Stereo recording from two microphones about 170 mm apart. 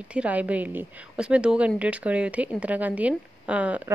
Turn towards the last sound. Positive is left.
turn(degrees=-10)  # may be behind; listen again after turning